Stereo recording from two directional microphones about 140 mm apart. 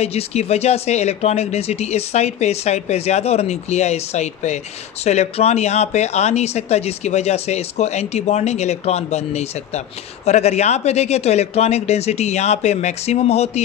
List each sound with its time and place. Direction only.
0.0 s speech: 50° left (ahead or behind)